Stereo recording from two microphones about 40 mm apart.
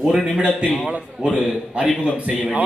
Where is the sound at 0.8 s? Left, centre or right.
Right.